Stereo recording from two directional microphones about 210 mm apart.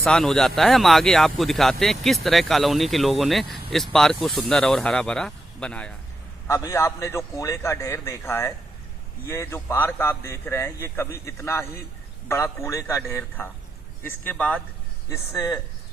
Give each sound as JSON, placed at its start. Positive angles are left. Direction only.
{"t": 0.0, "sound": "a man's voice", "side_deg": 0}